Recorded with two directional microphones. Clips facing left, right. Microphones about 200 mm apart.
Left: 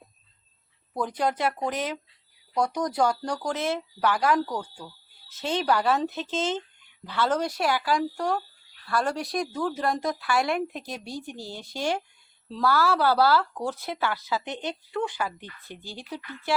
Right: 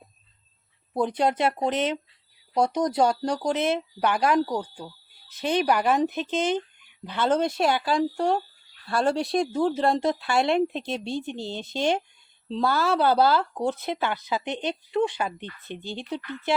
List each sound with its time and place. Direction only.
0.9 s speech: 25° right (ahead or behind)